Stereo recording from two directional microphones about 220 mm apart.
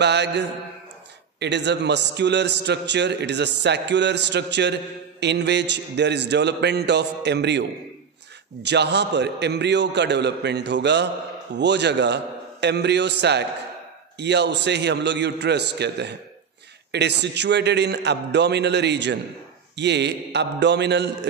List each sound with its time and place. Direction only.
0.0 s a man's voice: 50° right (ahead or behind)
8.6 s a man's voice: 50° right (ahead or behind)